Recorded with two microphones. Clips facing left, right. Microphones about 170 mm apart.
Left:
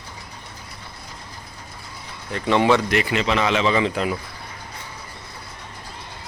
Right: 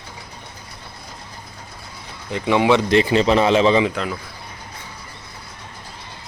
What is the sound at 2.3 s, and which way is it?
Speech, 10° right (ahead or behind).